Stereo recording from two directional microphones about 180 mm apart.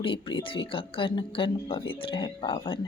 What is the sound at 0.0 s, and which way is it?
A woman's voice, 30° left (ahead or behind).